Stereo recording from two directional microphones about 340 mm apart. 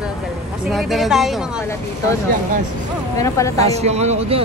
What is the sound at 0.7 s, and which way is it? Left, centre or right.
Speech, centre.